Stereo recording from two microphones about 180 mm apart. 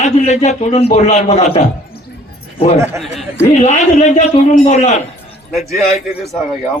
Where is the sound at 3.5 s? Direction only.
40° left (ahead or behind).